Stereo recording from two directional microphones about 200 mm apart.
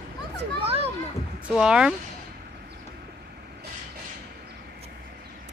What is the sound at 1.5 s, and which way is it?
Speech, 5° right (ahead or behind).